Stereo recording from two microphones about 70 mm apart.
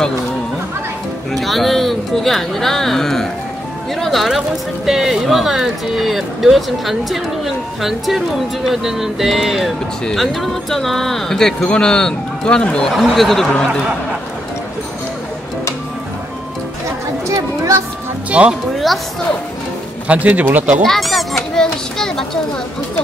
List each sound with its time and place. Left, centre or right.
1.3 s speech: centre
12.9 s speech: centre
17.3 s music: right
18.3 s speech: centre
20.1 s speech: right
20.8 s speech: centre
21.5 s children playing: centre